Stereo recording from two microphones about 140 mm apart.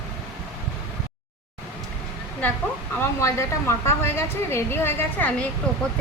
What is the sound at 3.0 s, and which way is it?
A woman's voice, 20° left (ahead or behind).